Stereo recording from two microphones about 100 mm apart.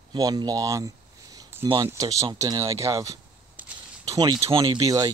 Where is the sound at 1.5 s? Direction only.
25° right (ahead or behind).